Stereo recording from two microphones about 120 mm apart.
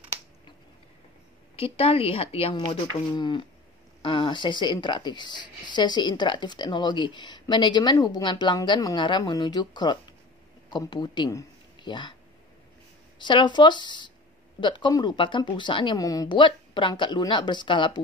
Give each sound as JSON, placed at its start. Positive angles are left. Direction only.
{"t": 1.6, "sound": "a woman's voice", "side_deg": 55}
{"t": 2.5, "sound": "a woman's voice", "side_deg": 40}
{"t": 13.2, "sound": "a woman's voice", "side_deg": 40}
{"t": 16.0, "sound": "a woman's voice", "side_deg": 30}